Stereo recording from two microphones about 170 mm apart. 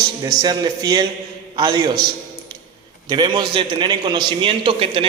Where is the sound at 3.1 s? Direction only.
25° right (ahead or behind).